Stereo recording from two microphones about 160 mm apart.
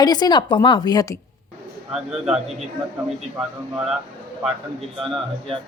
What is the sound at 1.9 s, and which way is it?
Speech, 5° right (ahead or behind).